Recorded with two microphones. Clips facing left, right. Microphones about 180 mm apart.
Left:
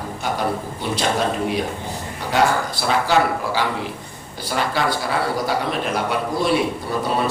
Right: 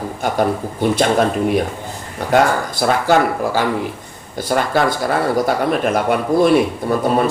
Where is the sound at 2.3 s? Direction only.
50° right (ahead or behind).